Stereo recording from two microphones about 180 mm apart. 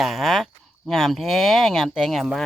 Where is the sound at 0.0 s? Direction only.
Centre (ahead or behind).